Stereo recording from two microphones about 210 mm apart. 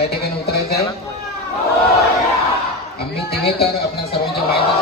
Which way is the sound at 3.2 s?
50° left (ahead or behind).